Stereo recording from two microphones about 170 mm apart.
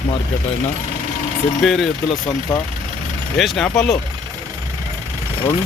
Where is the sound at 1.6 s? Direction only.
Centre (ahead or behind).